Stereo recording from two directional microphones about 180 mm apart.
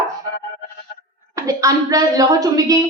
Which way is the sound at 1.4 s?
20° right (ahead or behind).